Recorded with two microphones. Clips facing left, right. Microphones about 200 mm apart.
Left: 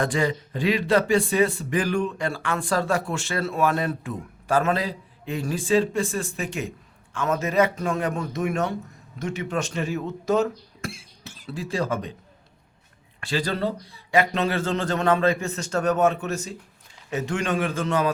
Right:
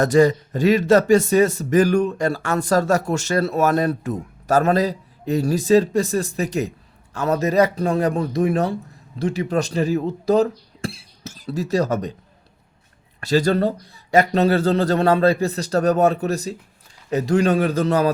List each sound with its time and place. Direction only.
0.0 s speech: 40° right (ahead or behind)
13.1 s speech: 40° right (ahead or behind)